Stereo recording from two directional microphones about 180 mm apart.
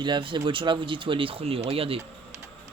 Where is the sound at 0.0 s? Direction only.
25° right (ahead or behind).